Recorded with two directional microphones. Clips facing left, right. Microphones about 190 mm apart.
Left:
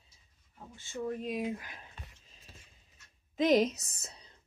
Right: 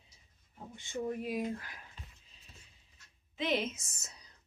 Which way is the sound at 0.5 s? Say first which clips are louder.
Right 1 dB; 15° right (ahead or behind).